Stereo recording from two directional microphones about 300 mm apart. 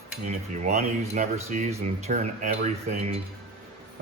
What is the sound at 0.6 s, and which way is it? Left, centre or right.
A man's voice, right.